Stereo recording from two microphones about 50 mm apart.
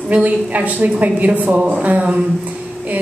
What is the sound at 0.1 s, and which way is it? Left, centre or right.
A woman's voice, right.